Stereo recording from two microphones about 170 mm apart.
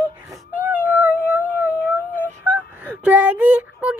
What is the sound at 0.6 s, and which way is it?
Cat, 10° right (ahead or behind).